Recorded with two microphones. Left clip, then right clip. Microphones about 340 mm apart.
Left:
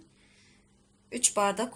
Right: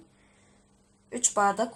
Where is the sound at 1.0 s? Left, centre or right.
Centre.